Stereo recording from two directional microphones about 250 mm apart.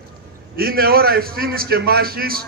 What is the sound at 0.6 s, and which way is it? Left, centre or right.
A man's voice, right.